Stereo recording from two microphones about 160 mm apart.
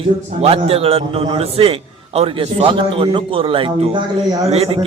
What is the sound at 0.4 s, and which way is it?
A man's voice, 40° right (ahead or behind).